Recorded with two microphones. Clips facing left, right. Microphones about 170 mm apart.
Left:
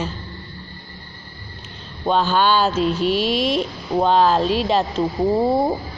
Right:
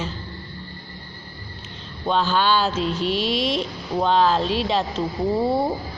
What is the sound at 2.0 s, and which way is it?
Speech, 50° left (ahead or behind).